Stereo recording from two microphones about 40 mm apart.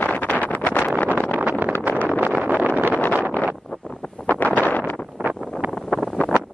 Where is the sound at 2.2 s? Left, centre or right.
Right.